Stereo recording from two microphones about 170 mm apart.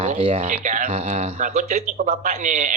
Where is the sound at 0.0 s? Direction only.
35° right (ahead or behind).